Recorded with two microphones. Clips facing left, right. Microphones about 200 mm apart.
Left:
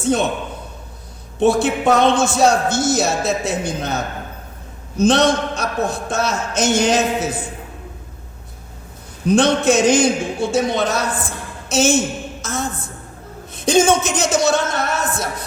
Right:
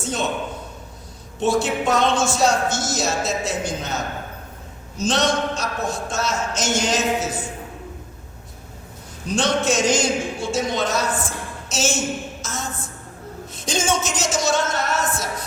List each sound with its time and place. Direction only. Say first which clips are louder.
0.0 s a man's voice: left 8 dB; 60° left (ahead or behind)
1.4 s a man's voice: left 5 dB; 60° left (ahead or behind)
9.2 s a man's voice: left 6 dB; 60° left (ahead or behind)